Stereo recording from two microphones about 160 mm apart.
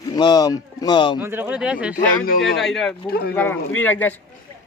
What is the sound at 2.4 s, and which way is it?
Speech, centre (ahead or behind).